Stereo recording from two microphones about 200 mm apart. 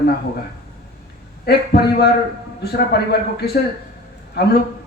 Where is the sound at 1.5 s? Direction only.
55° left (ahead or behind).